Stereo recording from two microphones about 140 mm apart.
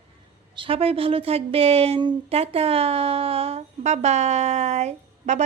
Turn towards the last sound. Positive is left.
turn(degrees=-55)  # may be behind; listen again after turning